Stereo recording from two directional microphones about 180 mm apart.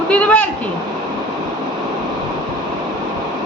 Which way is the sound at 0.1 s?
10° left (ahead or behind).